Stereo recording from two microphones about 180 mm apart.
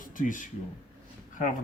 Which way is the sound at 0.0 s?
50° left (ahead or behind).